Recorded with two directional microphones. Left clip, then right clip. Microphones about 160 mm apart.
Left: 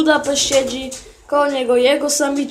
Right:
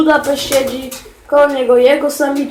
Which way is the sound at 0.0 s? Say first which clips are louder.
Right 3 dB; 15° left (ahead or behind).